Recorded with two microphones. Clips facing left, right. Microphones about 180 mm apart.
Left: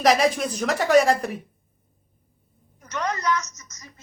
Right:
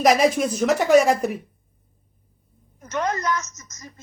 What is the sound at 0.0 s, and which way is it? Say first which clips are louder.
A woman's voice: right 2 dB; 10° right (ahead or behind).